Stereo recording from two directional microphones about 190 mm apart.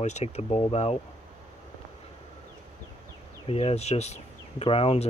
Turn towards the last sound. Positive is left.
turn(degrees=30)  # may be behind; listen again after turning